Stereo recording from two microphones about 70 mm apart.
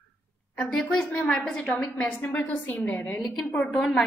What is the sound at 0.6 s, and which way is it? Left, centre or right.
Speech, centre.